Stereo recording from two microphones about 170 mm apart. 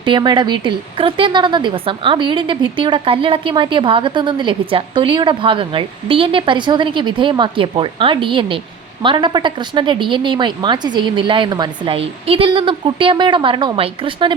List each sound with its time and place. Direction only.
0.0 s a woman's voice: 25° right (ahead or behind)